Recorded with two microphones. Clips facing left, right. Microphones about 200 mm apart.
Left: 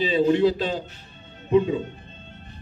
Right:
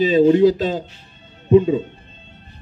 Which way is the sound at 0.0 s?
45° right (ahead or behind).